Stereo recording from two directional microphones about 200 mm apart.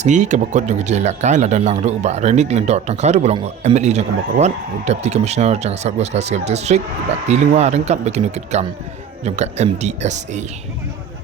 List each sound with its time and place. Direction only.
0.0 s speech: 35° right (ahead or behind)